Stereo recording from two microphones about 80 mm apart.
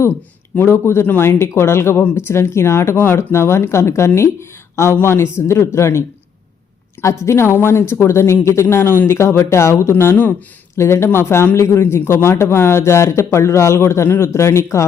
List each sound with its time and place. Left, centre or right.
0.1 s speech: left